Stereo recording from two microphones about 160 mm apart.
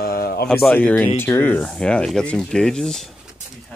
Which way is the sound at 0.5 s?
5° left (ahead or behind).